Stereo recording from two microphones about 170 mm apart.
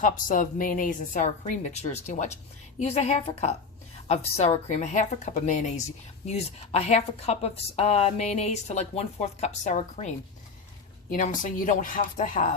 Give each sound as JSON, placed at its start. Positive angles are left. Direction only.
{"t": 0.0, "sound": "a woman's voice", "side_deg": 50}
{"t": 11.1, "sound": "a woman's voice", "side_deg": 50}